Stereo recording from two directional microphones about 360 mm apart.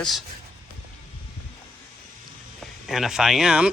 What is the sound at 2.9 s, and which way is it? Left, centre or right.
Speech, centre.